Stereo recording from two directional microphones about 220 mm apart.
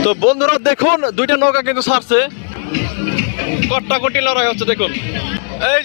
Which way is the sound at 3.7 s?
30° left (ahead or behind).